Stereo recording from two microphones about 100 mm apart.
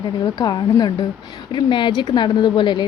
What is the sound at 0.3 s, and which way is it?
A woman's voice, 45° left (ahead or behind).